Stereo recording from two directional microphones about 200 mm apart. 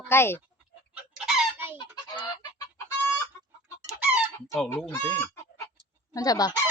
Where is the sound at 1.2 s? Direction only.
5° right (ahead or behind).